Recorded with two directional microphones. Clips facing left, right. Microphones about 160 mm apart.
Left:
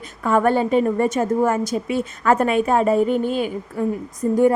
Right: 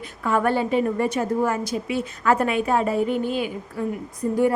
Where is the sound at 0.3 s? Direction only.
45° left (ahead or behind).